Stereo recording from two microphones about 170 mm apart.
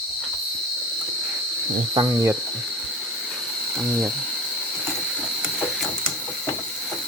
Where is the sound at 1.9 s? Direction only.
15° right (ahead or behind).